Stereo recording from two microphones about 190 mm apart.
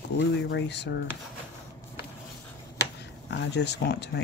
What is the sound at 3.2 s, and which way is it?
Speech, 60° left (ahead or behind).